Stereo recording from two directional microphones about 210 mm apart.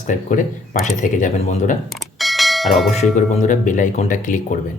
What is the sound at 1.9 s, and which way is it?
Bell, centre (ahead or behind).